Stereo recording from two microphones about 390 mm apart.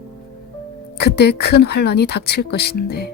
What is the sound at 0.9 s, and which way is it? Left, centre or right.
A woman's voice, left.